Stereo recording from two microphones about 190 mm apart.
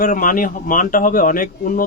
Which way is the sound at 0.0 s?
45° left (ahead or behind).